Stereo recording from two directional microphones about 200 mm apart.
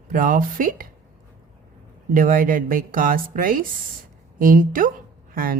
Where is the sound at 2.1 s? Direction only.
45° right (ahead or behind).